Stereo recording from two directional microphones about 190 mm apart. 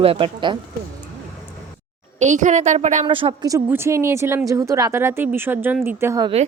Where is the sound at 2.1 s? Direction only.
40° right (ahead or behind); by 6.2 s 15° right (ahead or behind).